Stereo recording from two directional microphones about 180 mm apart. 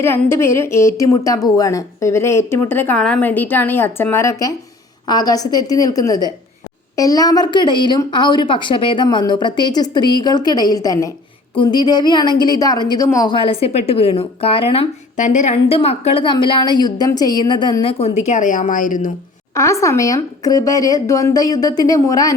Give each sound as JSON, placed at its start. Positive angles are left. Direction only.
{"t": 0.0, "sound": "a woman's voice", "side_deg": 15}
{"t": 19.5, "sound": "a woman's voice", "side_deg": 15}